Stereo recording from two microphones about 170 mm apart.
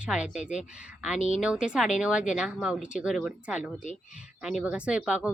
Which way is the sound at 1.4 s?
5° right (ahead or behind).